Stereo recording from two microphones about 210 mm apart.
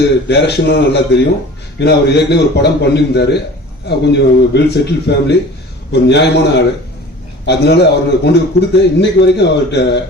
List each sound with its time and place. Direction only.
0.3 s a man's voice: 55° left (ahead or behind)
7.4 s a man's voice: 50° left (ahead or behind)